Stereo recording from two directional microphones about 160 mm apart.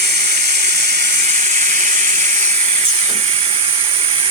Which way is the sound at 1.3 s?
50° right (ahead or behind).